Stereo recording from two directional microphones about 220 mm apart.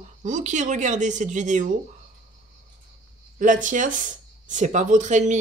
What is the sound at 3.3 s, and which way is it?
Speech, 35° right (ahead or behind).